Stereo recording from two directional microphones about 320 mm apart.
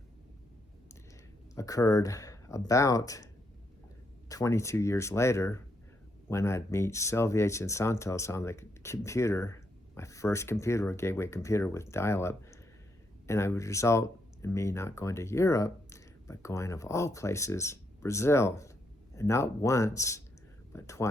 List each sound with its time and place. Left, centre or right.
1.5 s speech: centre
4.3 s speech: centre